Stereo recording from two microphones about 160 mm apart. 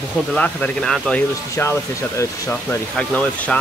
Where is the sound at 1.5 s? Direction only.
15° left (ahead or behind).